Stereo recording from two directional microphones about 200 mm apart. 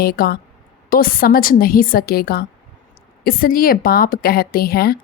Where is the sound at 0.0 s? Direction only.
50° left (ahead or behind).